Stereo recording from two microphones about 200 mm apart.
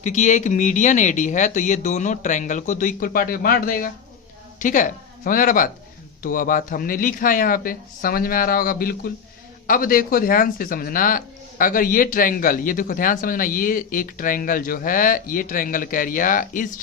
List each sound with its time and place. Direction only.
0.0 s speech: 35° left (ahead or behind)